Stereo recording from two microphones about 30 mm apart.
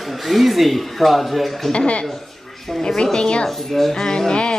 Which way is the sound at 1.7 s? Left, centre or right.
Left.